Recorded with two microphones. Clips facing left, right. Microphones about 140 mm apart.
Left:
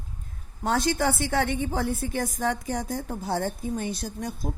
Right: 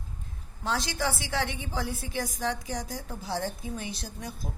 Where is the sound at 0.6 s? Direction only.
50° left (ahead or behind).